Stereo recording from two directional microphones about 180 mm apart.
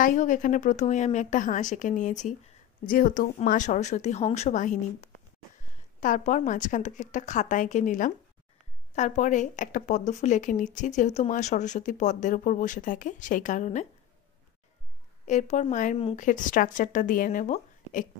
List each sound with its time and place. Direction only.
0.0 s speech: 45° left (ahead or behind)
15.2 s speech: 40° left (ahead or behind)